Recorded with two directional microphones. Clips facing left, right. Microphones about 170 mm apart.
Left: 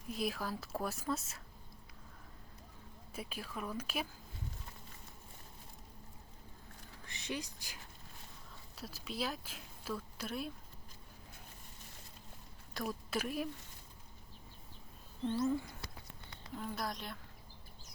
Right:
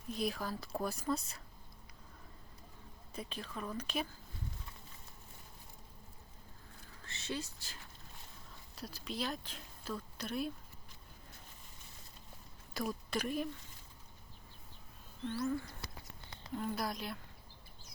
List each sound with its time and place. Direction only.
0.1 s speech: 5° left (ahead or behind)
3.1 s speech: 10° left (ahead or behind)
7.0 s speech: 15° left (ahead or behind)
8.7 s speech: 5° left (ahead or behind)
12.7 s speech: centre (ahead or behind)
15.3 s speech: 20° left (ahead or behind)
16.6 s speech: centre (ahead or behind)